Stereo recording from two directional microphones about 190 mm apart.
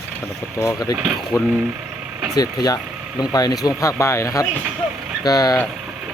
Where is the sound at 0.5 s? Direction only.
15° left (ahead or behind).